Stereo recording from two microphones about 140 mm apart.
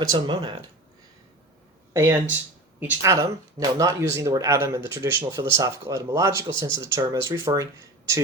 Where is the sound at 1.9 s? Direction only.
20° right (ahead or behind).